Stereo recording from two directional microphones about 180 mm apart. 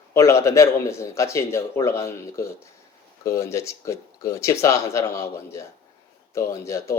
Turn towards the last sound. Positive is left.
turn(degrees=15)  # may be behind; listen again after turning